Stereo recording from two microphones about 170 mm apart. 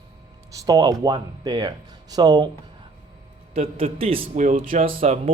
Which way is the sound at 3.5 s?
35° right (ahead or behind).